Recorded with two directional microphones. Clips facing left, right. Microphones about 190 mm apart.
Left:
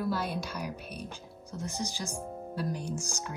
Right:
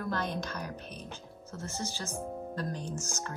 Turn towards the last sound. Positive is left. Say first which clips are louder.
# left 1 dB
turn(degrees=15)  # may be behind; listen again after turning